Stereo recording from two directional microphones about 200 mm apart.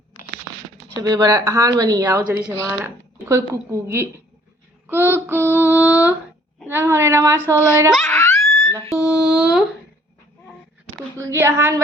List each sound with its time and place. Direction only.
0.9 s a woman's voice: 20° right (ahead or behind)
7.9 s laughter: 10° left (ahead or behind)
9.0 s a sound: 5° right (ahead or behind)
11.2 s a woman's voice: 15° right (ahead or behind)